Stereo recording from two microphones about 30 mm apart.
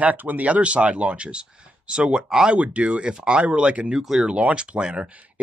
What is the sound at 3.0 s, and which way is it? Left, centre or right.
Speech, right.